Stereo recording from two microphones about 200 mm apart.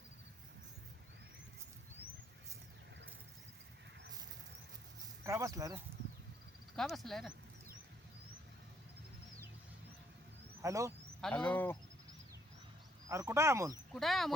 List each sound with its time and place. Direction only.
5.2 s speech: 15° right (ahead or behind)
6.7 s speech: centre (ahead or behind)
10.6 s speech: 15° right (ahead or behind)
11.2 s speech: 5° left (ahead or behind)
13.1 s speech: 15° right (ahead or behind)
13.9 s speech: centre (ahead or behind)